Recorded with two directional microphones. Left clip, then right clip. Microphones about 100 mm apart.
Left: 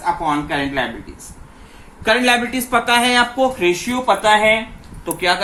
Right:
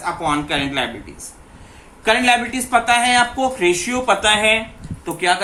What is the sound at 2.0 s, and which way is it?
Speech, 50° left (ahead or behind).